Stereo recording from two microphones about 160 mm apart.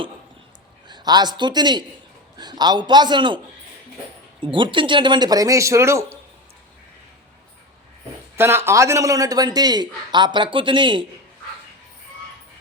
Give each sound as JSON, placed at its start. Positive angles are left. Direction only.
{"t": 0.9, "sound": "a woman's voice", "side_deg": -25}
{"t": 8.4, "sound": "a man's voice", "side_deg": -15}